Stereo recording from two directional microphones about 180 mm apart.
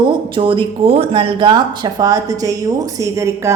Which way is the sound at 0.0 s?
30° right (ahead or behind).